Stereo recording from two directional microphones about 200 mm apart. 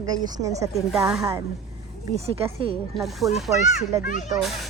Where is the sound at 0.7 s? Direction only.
Centre (ahead or behind).